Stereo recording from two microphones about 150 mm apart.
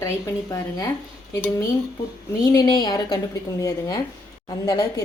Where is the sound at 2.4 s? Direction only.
25° left (ahead or behind).